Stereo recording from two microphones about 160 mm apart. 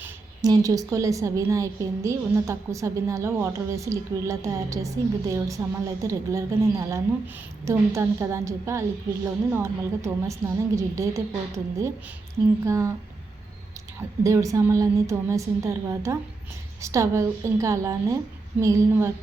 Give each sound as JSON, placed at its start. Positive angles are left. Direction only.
{"t": 0.4, "sound": "a woman's voice", "side_deg": -20}
{"t": 14.3, "sound": "a woman's voice", "side_deg": -20}